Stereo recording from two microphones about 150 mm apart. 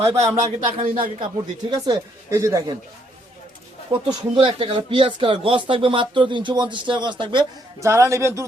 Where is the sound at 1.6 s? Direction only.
25° right (ahead or behind).